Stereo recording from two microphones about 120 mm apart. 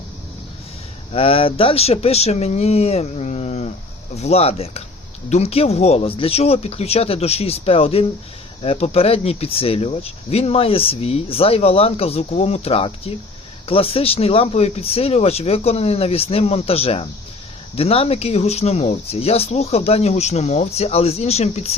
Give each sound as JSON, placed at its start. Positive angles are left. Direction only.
{"t": 1.1, "sound": "speech", "side_deg": 50}